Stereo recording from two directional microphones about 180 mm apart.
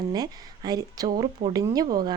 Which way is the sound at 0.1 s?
20° right (ahead or behind).